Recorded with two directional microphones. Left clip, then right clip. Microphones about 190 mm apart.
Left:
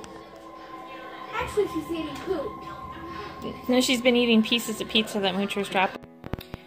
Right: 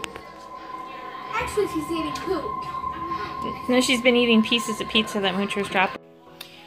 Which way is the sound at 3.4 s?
Centre (ahead or behind).